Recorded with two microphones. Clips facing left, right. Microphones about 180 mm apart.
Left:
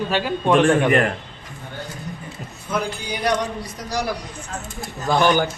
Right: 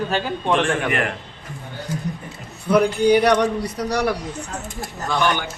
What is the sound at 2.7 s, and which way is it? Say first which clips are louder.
A man's voice: right 11 dB; 65° right (ahead or behind).